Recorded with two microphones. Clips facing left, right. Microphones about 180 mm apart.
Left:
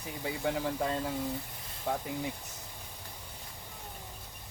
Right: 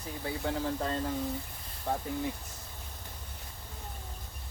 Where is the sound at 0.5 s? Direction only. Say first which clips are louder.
Even; 15° left (ahead or behind).